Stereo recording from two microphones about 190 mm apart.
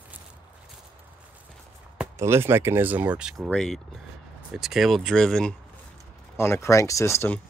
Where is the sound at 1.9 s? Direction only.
15° right (ahead or behind); by 5.6 s 5° left (ahead or behind).